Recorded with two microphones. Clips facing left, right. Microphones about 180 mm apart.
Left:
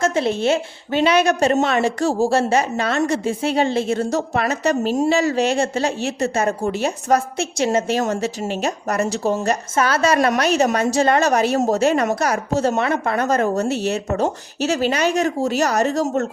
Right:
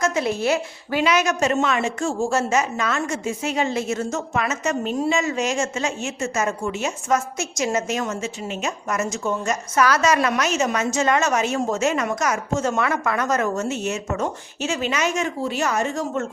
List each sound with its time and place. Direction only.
0.0 s a woman's voice: 30° left (ahead or behind)